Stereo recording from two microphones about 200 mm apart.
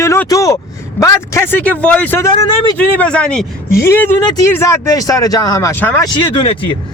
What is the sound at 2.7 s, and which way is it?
Speech, 5° left (ahead or behind).